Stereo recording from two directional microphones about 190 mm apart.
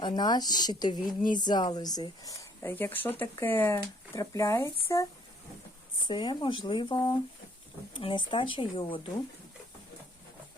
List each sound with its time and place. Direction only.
0.0 s speech: 20° left (ahead or behind)
6.1 s speech: 25° left (ahead or behind)